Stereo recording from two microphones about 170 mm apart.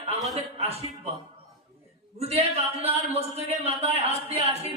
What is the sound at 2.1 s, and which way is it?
A man's voice, 40° right (ahead or behind).